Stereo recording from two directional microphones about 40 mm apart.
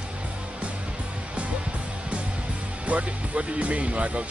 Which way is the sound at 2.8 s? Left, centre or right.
Right.